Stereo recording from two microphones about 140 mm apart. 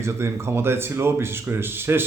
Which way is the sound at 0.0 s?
20° right (ahead or behind).